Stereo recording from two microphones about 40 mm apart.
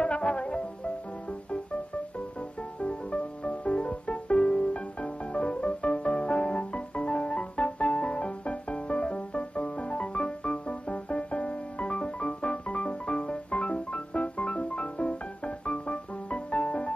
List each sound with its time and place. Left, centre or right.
0.0 s music: left
2.8 s music: left